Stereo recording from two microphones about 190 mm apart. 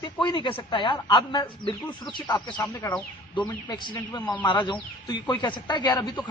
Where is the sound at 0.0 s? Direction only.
25° left (ahead or behind).